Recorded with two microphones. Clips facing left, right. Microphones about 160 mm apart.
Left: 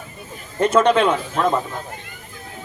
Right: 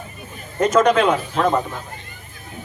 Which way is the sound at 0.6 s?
30° left (ahead or behind).